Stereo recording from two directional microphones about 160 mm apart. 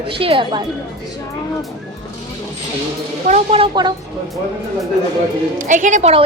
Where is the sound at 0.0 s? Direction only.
35° right (ahead or behind).